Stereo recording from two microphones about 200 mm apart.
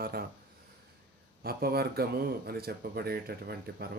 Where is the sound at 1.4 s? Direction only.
50° right (ahead or behind).